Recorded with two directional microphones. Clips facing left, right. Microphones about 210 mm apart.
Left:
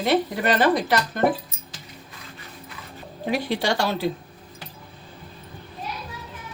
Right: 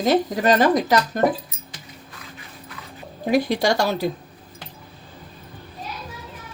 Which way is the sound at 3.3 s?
40° right (ahead or behind).